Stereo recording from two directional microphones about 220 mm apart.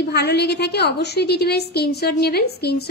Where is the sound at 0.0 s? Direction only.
50° left (ahead or behind).